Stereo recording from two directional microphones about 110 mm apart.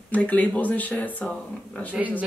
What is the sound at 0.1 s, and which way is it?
Speech, 15° left (ahead or behind).